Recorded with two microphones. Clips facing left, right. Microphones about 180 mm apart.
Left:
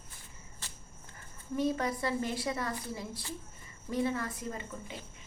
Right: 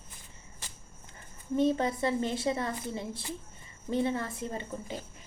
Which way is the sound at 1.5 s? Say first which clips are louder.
Right 4 dB; 25° right (ahead or behind).